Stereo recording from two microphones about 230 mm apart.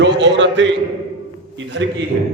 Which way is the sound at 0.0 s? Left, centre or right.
Right.